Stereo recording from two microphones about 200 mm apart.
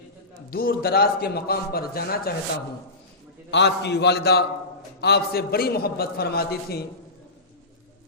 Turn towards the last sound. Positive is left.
turn(degrees=50)  # may be behind; listen again after turning